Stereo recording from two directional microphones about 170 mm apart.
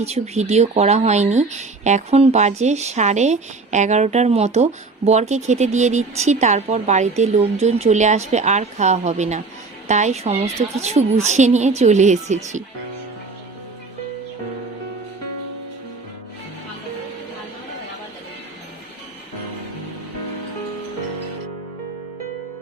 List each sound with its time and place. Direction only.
0.0 s a woman's voice: 40° right (ahead or behind)